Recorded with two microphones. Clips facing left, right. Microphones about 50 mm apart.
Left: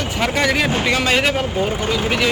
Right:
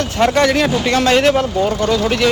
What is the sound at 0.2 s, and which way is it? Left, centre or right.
Speech, centre.